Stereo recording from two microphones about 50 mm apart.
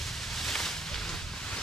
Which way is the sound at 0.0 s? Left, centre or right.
Centre.